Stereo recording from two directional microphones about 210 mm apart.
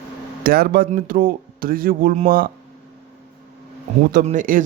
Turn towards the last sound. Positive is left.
turn(degrees=-40)  # may be behind; listen again after turning